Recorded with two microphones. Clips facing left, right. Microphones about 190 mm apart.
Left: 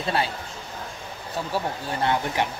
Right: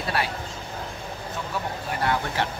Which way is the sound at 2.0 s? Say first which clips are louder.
Left 2 dB; 15° left (ahead or behind).